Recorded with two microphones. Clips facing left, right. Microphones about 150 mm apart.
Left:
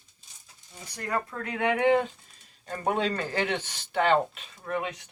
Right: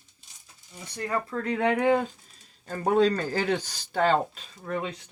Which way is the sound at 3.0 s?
40° right (ahead or behind).